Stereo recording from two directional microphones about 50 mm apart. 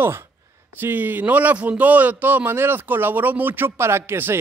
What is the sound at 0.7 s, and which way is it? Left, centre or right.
A man's voice, right.